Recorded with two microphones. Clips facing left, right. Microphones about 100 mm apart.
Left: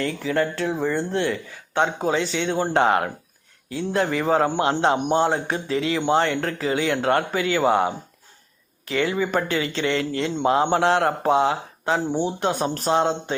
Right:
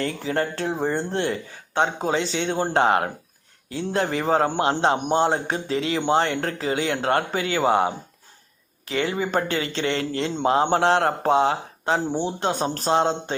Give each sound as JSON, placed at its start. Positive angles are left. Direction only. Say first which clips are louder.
{"t": 0.2, "sound": "speech", "louder": "left 2 dB", "side_deg": -35}